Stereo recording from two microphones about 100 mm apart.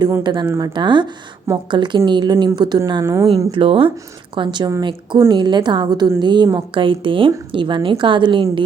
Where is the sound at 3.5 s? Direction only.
65° right (ahead or behind).